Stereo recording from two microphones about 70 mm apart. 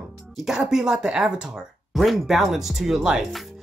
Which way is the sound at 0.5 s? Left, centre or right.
Centre.